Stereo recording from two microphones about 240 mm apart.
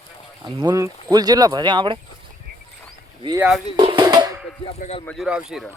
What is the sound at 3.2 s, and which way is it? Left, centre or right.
Speech, centre.